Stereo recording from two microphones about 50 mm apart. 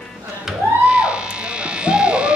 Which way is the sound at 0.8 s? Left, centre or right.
Centre.